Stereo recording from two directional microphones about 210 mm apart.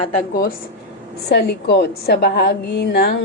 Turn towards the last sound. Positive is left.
turn(degrees=50)  # may be behind; listen again after turning